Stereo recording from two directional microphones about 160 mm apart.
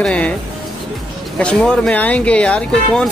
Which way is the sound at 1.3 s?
5° left (ahead or behind).